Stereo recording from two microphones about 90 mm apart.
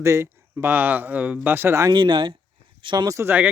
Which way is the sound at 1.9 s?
55° right (ahead or behind).